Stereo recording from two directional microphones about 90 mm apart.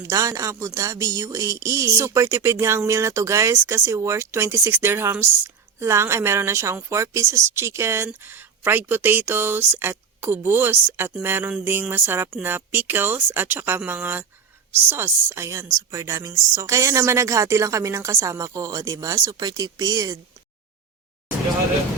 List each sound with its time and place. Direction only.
0.0 s speech: 40° right (ahead or behind)